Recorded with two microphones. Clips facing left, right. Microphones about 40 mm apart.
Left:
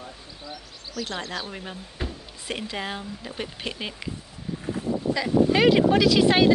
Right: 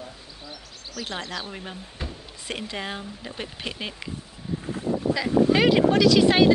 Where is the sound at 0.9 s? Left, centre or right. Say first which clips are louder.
Left 1 dB; centre.